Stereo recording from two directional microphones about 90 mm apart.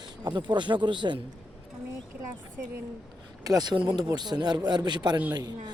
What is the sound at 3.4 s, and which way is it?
Speech, 45° right (ahead or behind).